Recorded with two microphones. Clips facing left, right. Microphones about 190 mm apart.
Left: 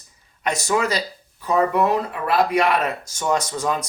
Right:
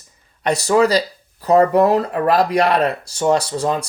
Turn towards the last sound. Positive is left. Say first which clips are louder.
# right 5 dB
turn(degrees=-30)  # may be behind; listen again after turning